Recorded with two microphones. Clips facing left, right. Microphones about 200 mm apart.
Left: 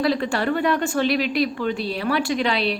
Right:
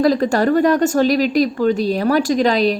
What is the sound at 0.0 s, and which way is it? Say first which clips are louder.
A woman's voice: right 7 dB; 40° right (ahead or behind).